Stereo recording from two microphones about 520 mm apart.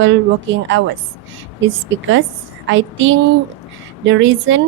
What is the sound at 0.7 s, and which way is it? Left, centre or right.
A woman's voice, right.